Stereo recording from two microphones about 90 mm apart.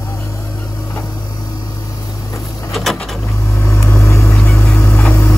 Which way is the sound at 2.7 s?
Centre (ahead or behind).